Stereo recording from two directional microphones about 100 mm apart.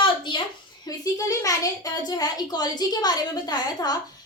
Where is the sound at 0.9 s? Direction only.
35° left (ahead or behind).